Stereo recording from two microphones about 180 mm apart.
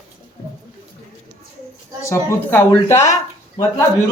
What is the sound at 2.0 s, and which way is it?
Speech, 15° left (ahead or behind).